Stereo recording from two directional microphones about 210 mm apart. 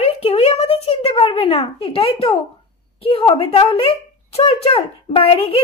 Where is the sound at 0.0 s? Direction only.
25° left (ahead or behind).